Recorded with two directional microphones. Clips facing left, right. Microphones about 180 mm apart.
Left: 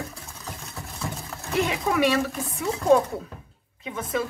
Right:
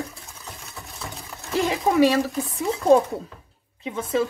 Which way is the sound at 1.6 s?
35° right (ahead or behind).